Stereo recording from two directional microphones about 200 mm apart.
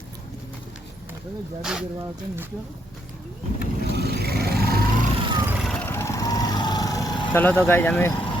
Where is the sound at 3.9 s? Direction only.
55° right (ahead or behind).